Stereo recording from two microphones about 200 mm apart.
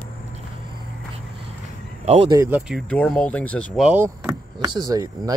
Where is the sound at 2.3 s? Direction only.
10° right (ahead or behind); by 3.8 s 5° left (ahead or behind).